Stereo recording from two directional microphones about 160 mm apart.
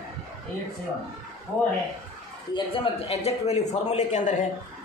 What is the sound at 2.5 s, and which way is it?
Speech, 35° left (ahead or behind).